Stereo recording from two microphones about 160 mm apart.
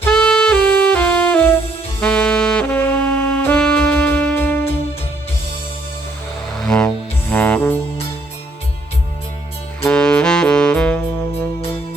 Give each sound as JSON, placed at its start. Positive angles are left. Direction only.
{"t": 0.1, "sound": "saxophone", "side_deg": 5}
{"t": 6.5, "sound": "music", "side_deg": 5}
{"t": 9.8, "sound": "saxophone", "side_deg": 5}